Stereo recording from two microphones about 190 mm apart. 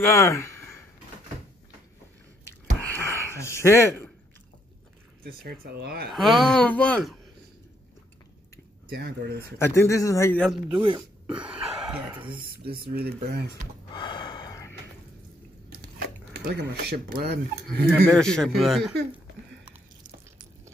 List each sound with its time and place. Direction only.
0.0 s a sound: 15° left (ahead or behind)
2.8 s a sound: 10° left (ahead or behind)
5.2 s speech: 55° right (ahead or behind)
6.1 s speech: centre (ahead or behind)
8.8 s speech: 60° right (ahead or behind)
9.6 s a man's voice: 15° left (ahead or behind)
10.7 s speech: 25° right (ahead or behind)
11.0 s a sound: 5° right (ahead or behind)
12.9 s speech: 55° right (ahead or behind)
13.9 s gasp: 25° left (ahead or behind)
16.0 s speech: 60° right (ahead or behind)
17.6 s speech: 5° left (ahead or behind)